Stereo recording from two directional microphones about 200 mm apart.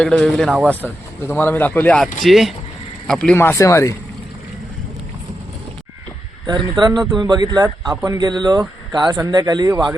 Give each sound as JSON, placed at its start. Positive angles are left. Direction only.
{"t": 0.0, "sound": "speech", "side_deg": 5}
{"t": 6.4, "sound": "speech", "side_deg": -20}